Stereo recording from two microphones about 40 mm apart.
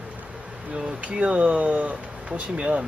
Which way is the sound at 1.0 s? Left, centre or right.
Right.